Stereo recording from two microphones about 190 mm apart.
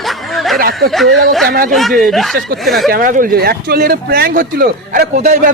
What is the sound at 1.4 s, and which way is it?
Speech, 55° right (ahead or behind).